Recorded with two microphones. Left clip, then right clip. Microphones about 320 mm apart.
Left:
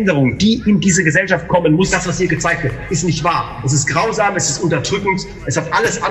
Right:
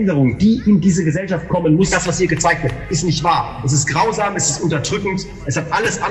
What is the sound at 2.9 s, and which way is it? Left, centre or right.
A man's voice, centre.